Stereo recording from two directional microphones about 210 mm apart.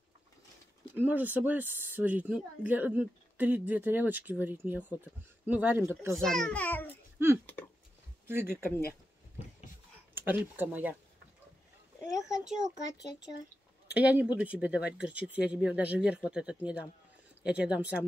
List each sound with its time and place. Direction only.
0.9 s speech: 10° right (ahead or behind)
6.1 s a child's voice: 5° left (ahead or behind)
8.3 s speech: 10° right (ahead or behind)
10.1 s speech: 10° right (ahead or behind)
12.0 s a sound: 15° left (ahead or behind)
12.4 s a child's voice: centre (ahead or behind)
13.8 s a child's voice: 5° right (ahead or behind)